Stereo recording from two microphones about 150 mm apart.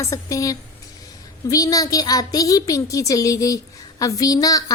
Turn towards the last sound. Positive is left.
turn(degrees=25)  # may be behind; listen again after turning